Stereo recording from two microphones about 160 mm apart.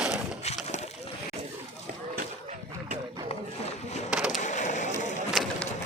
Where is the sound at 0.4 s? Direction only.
40° left (ahead or behind).